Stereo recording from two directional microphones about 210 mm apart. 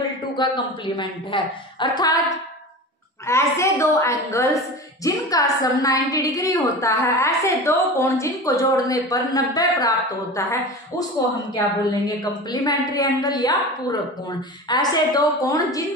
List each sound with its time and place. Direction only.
0.4 s a woman's voice: 20° left (ahead or behind)
3.3 s a woman's voice: 15° left (ahead or behind)